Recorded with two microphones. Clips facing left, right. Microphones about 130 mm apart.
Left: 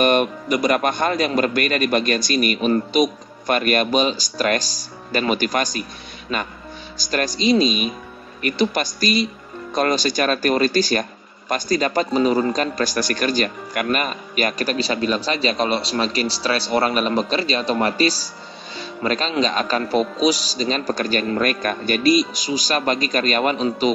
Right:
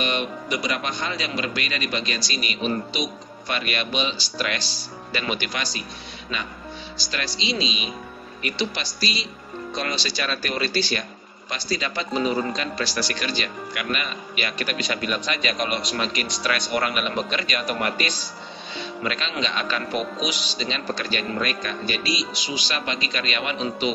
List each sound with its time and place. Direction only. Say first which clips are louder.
0.0 s speech: left 9 dB; 50° left (ahead or behind)